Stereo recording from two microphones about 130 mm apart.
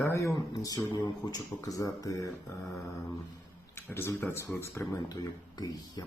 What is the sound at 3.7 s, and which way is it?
Speech, 20° left (ahead or behind).